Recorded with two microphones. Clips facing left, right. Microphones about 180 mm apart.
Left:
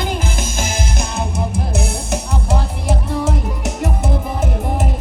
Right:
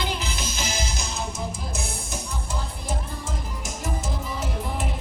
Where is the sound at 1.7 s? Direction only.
70° left (ahead or behind).